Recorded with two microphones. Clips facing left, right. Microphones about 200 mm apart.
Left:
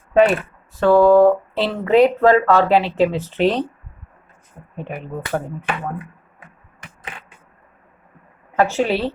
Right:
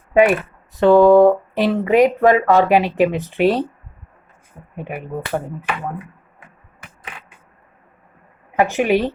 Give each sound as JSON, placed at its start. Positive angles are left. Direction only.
{"t": 0.1, "sound": "speech", "side_deg": -10}
{"t": 4.8, "sound": "speech", "side_deg": -10}
{"t": 8.5, "sound": "speech", "side_deg": -15}